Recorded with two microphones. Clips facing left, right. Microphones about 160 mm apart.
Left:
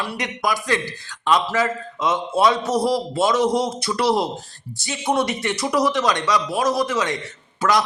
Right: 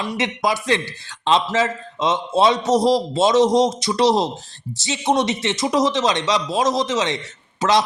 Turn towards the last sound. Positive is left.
turn(degrees=-25)  # may be behind; listen again after turning